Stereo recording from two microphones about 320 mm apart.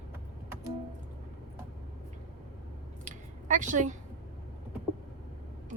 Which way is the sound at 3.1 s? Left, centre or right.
Right.